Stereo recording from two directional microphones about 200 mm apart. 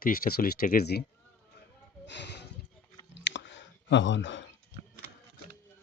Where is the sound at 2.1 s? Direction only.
60° left (ahead or behind).